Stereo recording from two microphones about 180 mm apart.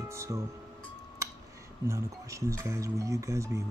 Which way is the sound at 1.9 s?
15° right (ahead or behind).